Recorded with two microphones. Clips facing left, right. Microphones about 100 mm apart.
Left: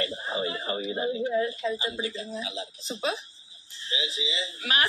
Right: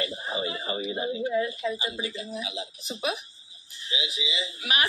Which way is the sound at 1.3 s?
35° left (ahead or behind).